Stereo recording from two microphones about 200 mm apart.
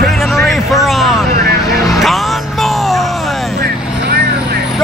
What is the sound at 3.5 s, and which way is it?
Vehicle, 50° right (ahead or behind).